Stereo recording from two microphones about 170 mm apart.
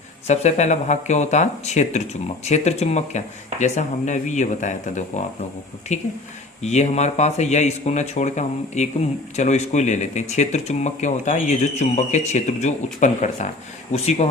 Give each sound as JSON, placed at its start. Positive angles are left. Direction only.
{"t": 0.3, "sound": "speech", "side_deg": 40}